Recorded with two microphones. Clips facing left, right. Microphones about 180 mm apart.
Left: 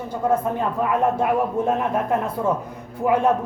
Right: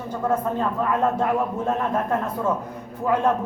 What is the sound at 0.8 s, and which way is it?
A man's voice, 15° left (ahead or behind).